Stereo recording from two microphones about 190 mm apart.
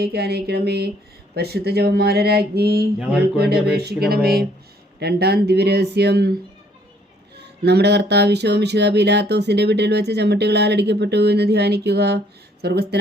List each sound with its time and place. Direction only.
0.0 s speech: 55° right (ahead or behind)
7.3 s speech: 60° right (ahead or behind)